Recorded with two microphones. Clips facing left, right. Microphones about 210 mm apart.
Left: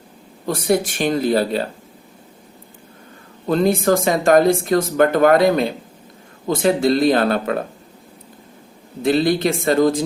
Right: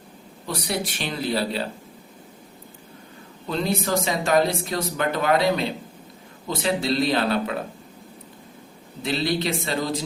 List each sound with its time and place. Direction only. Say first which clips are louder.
0.4 s speech: left 9 dB; 50° left (ahead or behind)
3.4 s speech: left 9 dB; 50° left (ahead or behind)
9.0 s speech: left 8 dB; 50° left (ahead or behind)